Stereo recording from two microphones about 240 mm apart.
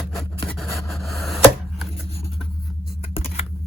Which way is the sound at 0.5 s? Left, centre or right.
Centre.